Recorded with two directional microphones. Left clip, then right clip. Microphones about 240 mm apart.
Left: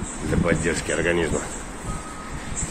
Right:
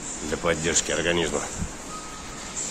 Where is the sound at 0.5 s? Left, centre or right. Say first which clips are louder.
Even; centre.